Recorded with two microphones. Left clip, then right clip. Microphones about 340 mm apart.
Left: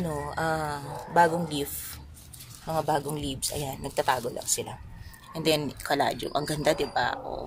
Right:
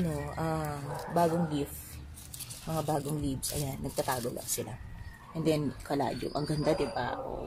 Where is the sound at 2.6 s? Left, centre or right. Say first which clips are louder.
Left 6 dB; left.